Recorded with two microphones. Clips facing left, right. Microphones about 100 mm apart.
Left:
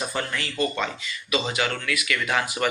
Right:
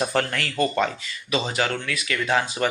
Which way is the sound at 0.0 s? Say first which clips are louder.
Right 5 dB; 65° right (ahead or behind).